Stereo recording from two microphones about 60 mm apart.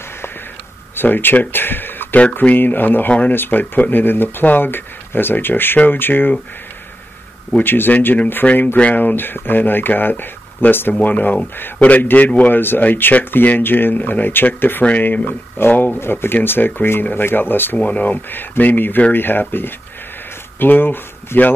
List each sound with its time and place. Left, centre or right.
0.9 s speech: left
7.6 s speech: left
8.4 s speech: centre
8.7 s a man's voice: left
12.5 s speech: left
20.5 s speech: left